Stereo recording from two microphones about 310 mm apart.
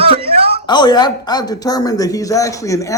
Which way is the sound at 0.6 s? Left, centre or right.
Centre.